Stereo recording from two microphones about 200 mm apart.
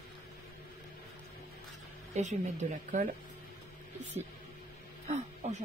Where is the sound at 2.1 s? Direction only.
35° right (ahead or behind).